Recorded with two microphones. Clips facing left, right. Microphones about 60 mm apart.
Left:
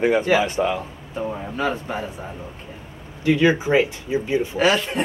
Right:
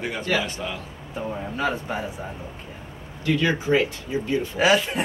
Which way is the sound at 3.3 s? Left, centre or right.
Centre.